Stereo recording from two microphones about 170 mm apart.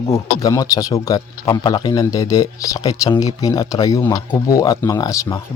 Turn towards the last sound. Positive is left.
turn(degrees=20)  # may be behind; listen again after turning